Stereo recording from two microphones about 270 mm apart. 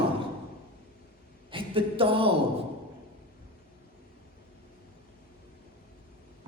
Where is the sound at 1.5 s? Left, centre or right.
Centre.